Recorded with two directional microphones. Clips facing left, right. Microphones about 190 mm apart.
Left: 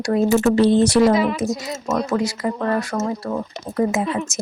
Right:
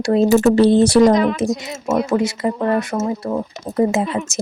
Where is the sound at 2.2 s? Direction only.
25° right (ahead or behind).